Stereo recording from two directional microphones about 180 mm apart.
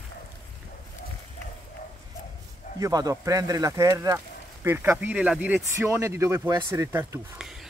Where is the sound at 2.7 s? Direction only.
20° right (ahead or behind).